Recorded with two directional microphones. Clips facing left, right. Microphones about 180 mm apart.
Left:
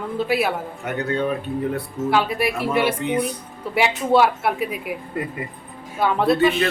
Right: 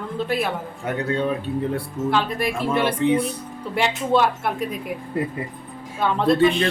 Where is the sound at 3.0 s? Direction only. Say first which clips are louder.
Right 3 dB; 30° right (ahead or behind).